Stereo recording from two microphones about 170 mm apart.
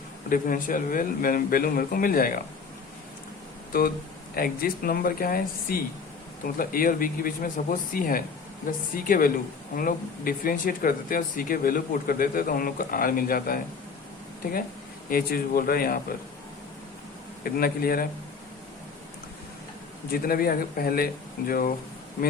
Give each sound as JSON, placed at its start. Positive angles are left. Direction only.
{"t": 0.3, "sound": "speech", "side_deg": 55}
{"t": 3.7, "sound": "speech", "side_deg": 60}
{"t": 15.1, "sound": "speech", "side_deg": 60}
{"t": 17.4, "sound": "speech", "side_deg": 60}
{"t": 20.1, "sound": "speech", "side_deg": 60}